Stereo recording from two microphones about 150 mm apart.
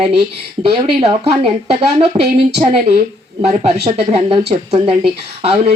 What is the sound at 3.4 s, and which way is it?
Speech, 45° right (ahead or behind).